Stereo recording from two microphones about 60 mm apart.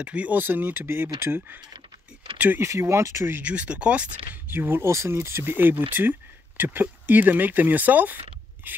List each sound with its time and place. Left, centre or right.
0.0 s speech: right
2.3 s vehicle: right
2.6 s speech: right
3.4 s speech: right
4.5 s speech: right
4.8 s speech: right
5.4 s speech: right